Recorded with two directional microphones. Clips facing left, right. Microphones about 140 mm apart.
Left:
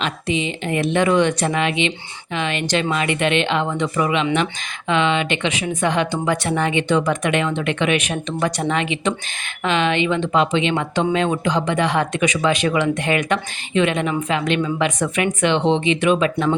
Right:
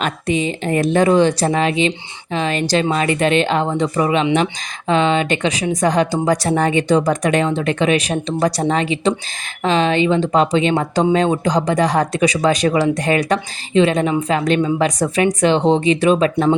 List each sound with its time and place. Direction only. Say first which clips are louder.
0.0 s speech: right 3 dB; 45° right (ahead or behind)